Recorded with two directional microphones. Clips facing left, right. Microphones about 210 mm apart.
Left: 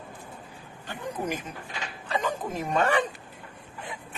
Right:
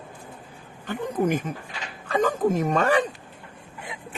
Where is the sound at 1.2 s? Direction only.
55° right (ahead or behind).